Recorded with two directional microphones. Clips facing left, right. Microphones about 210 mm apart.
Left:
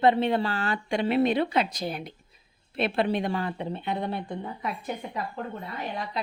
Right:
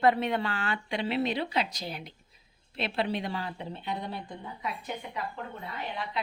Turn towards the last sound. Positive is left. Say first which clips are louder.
# left 3 dB
turn(degrees=45)  # may be behind; listen again after turning